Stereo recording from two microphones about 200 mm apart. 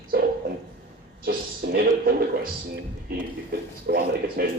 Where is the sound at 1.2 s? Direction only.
50° right (ahead or behind).